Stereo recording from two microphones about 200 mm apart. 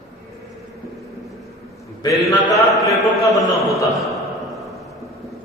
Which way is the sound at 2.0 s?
15° left (ahead or behind).